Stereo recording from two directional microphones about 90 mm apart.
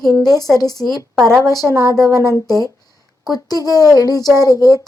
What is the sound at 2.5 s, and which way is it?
Speech, 40° left (ahead or behind).